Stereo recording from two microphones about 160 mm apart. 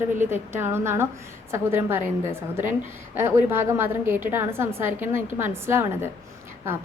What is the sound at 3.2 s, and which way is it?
A woman's voice, 15° right (ahead or behind).